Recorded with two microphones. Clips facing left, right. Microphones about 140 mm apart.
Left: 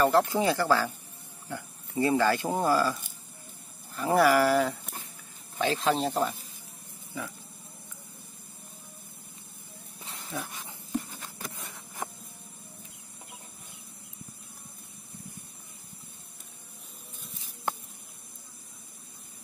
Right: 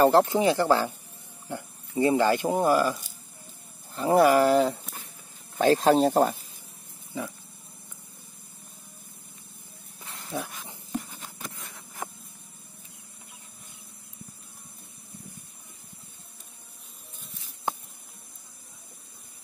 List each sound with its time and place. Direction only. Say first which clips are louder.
0.0 s speech: right 4 dB; 30° right (ahead or behind)
3.9 s speech: right 3 dB; 25° right (ahead or behind)
5.6 s speech: right 7 dB; 40° right (ahead or behind)
10.3 s speech: right 4 dB; 25° right (ahead or behind)